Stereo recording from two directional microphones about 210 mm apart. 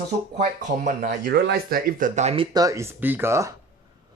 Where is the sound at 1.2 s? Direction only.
55° right (ahead or behind); by 2.4 s 30° right (ahead or behind).